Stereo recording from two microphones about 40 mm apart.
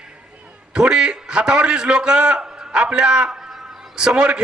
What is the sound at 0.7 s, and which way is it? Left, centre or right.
A man's voice, centre.